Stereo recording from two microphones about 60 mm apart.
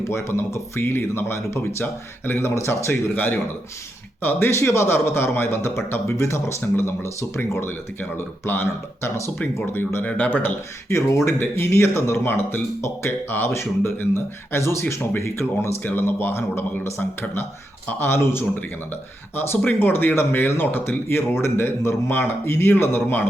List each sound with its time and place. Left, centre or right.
0.0 s speech: left
1.8 s speech: left
2.4 s speech: left
4.2 s speech: left
10.0 s speech: left
10.8 s speech: left
11.3 s speech: left
15.8 s speech: left